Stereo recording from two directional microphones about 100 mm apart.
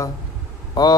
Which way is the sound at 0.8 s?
45° left (ahead or behind).